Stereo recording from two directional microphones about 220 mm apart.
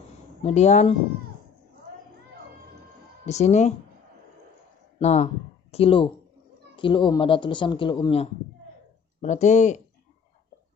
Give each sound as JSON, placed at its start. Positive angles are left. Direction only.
{"t": 0.4, "sound": "speech", "side_deg": 30}
{"t": 3.3, "sound": "speech", "side_deg": 30}
{"t": 4.9, "sound": "a woman's voice", "side_deg": 30}